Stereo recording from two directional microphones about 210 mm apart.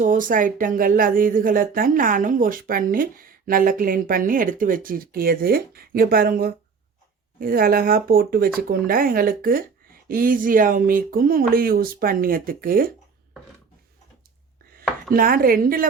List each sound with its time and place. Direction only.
0.0 s speech: 40° right (ahead or behind)
15.1 s speech: 45° right (ahead or behind)